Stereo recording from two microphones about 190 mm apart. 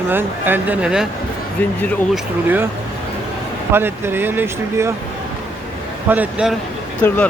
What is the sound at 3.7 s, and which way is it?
Speech, 10° right (ahead or behind).